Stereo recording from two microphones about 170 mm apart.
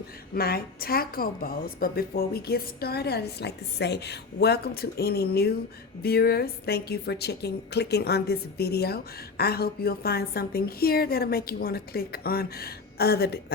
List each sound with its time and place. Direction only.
0.3 s a woman's voice: 65° left (ahead or behind)